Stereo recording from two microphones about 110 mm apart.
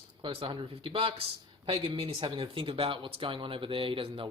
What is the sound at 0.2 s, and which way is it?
Speech, 55° right (ahead or behind).